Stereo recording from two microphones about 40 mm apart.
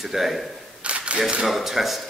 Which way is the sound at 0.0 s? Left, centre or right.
Centre.